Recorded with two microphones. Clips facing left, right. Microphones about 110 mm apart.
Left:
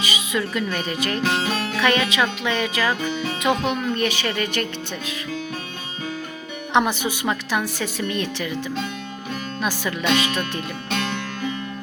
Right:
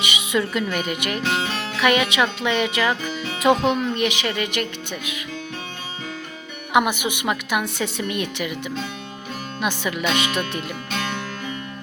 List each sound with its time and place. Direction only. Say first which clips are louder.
0.0 s a woman's voice: right 2 dB; 25° right (ahead or behind)
3.9 s a woman's voice: even; 15° right (ahead or behind)
6.7 s a woman's voice: right 1 dB; 15° right (ahead or behind)
9.6 s speech: right 2 dB; 20° right (ahead or behind)